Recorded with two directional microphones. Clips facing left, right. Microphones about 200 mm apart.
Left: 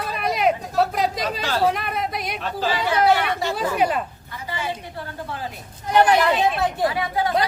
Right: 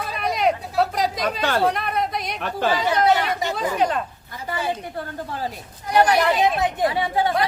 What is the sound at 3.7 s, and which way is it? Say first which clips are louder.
Speech: left 1 dB; 10° left (ahead or behind).